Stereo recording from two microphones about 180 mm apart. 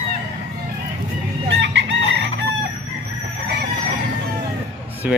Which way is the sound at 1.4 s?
85° right.